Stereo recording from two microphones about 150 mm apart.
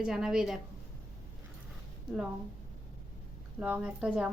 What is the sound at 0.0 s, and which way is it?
Speech, 5° right (ahead or behind).